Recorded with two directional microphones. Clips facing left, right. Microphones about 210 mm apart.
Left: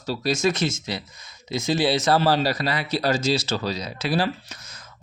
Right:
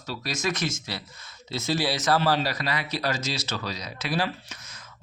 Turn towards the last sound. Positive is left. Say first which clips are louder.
# left 4 dB
turn(degrees=30)  # may be behind; listen again after turning